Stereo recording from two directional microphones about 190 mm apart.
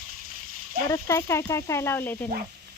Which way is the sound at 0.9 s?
15° left (ahead or behind).